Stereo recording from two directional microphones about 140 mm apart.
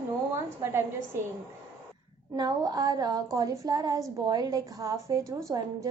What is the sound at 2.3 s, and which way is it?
A woman's voice, 25° right (ahead or behind).